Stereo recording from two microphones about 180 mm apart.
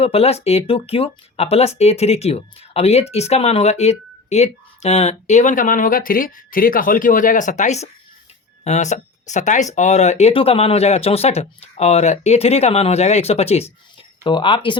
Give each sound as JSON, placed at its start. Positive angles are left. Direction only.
{"t": 0.0, "sound": "speech", "side_deg": 35}